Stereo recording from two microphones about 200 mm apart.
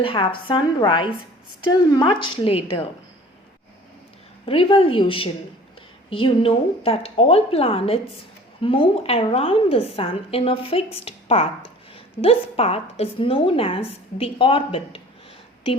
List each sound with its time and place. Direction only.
0.0 s a woman's voice: 25° left (ahead or behind)
4.4 s a woman's voice: 25° left (ahead or behind)